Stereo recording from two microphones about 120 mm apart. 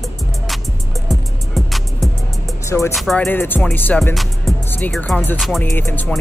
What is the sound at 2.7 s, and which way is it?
Speech, 20° left (ahead or behind).